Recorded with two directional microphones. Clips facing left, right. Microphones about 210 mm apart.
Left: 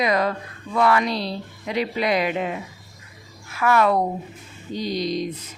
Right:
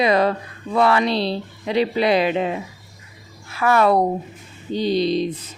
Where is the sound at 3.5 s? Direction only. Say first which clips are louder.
Right 3 dB; 30° right (ahead or behind).